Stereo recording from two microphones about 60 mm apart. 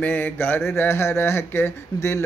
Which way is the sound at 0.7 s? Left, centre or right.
Left.